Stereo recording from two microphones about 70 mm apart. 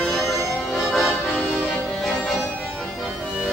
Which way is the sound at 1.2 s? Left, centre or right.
Centre.